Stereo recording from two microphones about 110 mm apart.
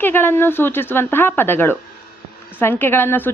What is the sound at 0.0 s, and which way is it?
Speech, 20° left (ahead or behind).